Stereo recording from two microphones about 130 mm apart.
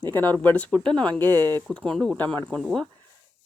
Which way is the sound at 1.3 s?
30° right (ahead or behind).